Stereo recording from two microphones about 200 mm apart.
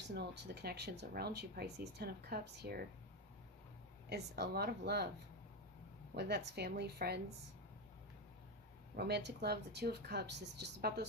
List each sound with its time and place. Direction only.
0.1 s speech: 55° right (ahead or behind)
4.1 s a woman's voice: 55° right (ahead or behind)
6.1 s a woman's voice: 55° right (ahead or behind)
9.0 s speech: 55° right (ahead or behind)